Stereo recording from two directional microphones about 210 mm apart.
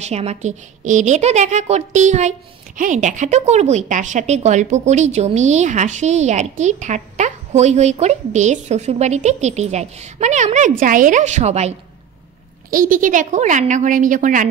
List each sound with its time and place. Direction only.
0.0 s speech: 30° right (ahead or behind)
12.7 s speech: 40° right (ahead or behind)